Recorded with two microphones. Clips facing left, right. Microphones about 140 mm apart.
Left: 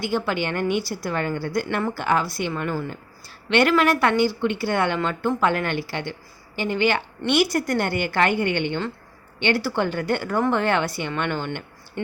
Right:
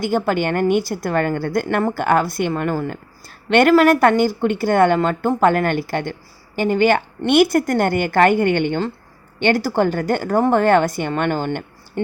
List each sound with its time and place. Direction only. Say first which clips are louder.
0.0 s a woman's voice: right 5 dB; 45° right (ahead or behind)